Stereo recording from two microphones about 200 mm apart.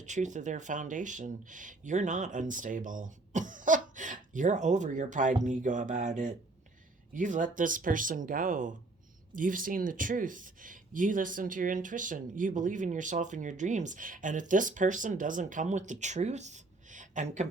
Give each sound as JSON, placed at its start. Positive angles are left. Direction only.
{"t": 0.0, "sound": "speech", "side_deg": -35}